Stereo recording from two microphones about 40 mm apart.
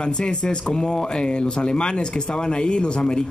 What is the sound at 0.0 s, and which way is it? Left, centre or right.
Speech, left.